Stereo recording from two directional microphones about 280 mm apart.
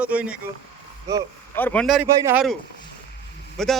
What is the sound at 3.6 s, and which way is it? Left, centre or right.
Speech, centre.